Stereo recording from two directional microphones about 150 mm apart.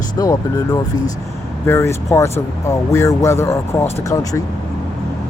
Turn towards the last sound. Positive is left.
turn(degrees=20)  # may be behind; listen again after turning